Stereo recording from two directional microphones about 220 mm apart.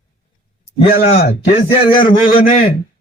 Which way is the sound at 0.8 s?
40° left (ahead or behind).